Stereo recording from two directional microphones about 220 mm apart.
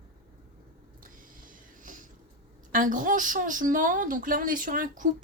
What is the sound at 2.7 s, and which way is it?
Speech, 35° right (ahead or behind).